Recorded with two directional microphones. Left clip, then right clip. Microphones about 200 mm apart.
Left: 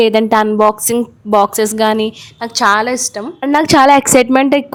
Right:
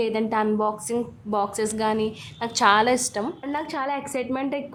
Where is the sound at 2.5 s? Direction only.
30° left (ahead or behind).